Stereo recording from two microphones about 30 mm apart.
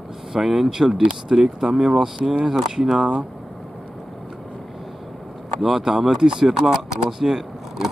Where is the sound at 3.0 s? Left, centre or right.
Right.